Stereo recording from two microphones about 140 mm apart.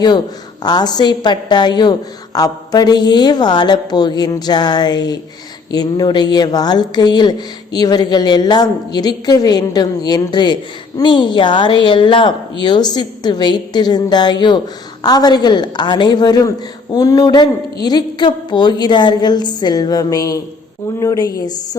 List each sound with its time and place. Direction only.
0.6 s a woman's voice: 30° left (ahead or behind)